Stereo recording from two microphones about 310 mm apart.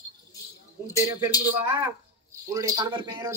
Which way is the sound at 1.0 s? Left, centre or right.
Centre.